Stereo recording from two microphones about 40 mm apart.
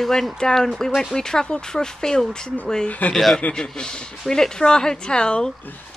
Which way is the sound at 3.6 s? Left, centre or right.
Centre.